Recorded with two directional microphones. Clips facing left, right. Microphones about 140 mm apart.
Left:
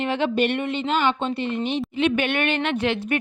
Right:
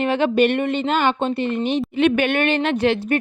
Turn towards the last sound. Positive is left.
turn(degrees=-35)  # may be behind; listen again after turning